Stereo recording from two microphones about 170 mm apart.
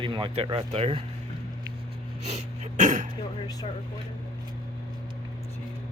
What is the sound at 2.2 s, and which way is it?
Throat clearing, 40° right (ahead or behind).